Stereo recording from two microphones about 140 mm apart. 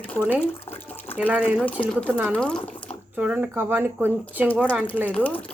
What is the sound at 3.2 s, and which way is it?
Speech, 10° right (ahead or behind).